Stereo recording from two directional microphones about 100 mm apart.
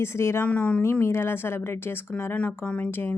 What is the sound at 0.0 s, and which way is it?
Speech, 25° left (ahead or behind).